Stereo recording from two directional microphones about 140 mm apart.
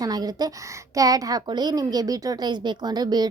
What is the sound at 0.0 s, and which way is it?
A woman's voice, 30° right (ahead or behind).